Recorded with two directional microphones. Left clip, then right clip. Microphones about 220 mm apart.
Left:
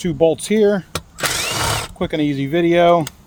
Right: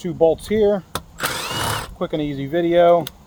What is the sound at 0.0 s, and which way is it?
Speech, 55° left (ahead or behind).